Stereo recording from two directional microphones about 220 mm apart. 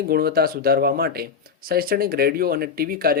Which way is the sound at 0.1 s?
45° right (ahead or behind).